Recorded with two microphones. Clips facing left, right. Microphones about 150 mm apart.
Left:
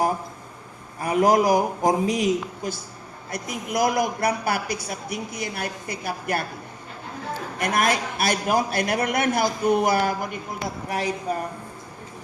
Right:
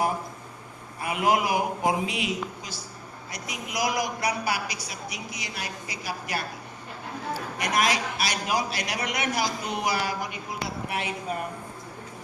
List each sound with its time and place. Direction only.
1.0 s a woman's voice: 40° left (ahead or behind)
7.6 s a woman's voice: 50° left (ahead or behind)
10.8 s speech: 40° left (ahead or behind)